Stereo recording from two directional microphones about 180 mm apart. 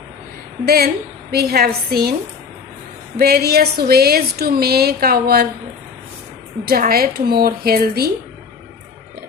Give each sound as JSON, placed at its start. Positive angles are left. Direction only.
{"t": 0.6, "sound": "speech", "side_deg": -60}
{"t": 3.2, "sound": "speech", "side_deg": -60}
{"t": 6.7, "sound": "speech", "side_deg": -55}